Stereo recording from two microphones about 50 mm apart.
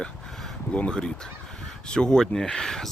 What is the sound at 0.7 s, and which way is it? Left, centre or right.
Speech, left.